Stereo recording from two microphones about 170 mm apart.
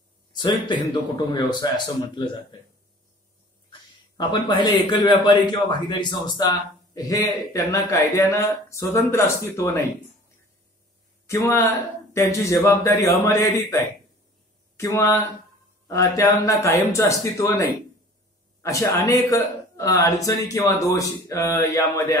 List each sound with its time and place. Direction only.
0.3 s a man's voice: 25° left (ahead or behind)
4.2 s a man's voice: 25° left (ahead or behind)
11.2 s a man's voice: 15° left (ahead or behind)
14.8 s a man's voice: 15° left (ahead or behind)